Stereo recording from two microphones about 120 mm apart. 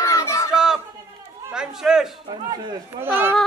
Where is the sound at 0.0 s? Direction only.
25° left (ahead or behind).